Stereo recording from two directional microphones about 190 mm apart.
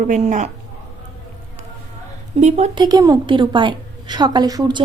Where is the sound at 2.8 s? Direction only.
20° right (ahead or behind).